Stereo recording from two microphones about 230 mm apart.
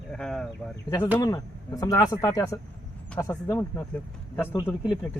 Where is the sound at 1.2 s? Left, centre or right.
Centre.